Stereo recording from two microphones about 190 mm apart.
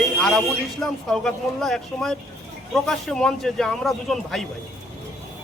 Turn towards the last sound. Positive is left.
turn(degrees=0)  # may be behind; listen again after turning